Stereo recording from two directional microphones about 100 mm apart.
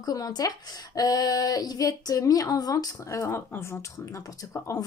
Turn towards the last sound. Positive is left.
turn(degrees=30)  # may be behind; listen again after turning